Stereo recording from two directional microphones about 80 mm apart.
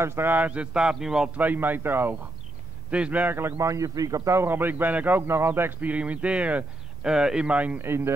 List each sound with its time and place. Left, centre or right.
0.0 s speech: right; by 1.4 s centre
1.4 s a man's voice: right
2.9 s a man's voice: centre
3.3 s a man's voice: right; by 7.8 s centre
7.8 s speech: right